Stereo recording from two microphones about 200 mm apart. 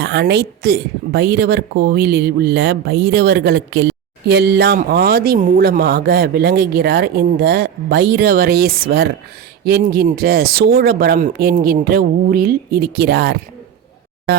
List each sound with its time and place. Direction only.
0.0 s a woman's voice: 55° right (ahead or behind)